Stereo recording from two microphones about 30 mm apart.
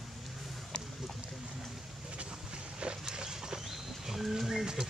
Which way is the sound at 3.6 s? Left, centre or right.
Centre.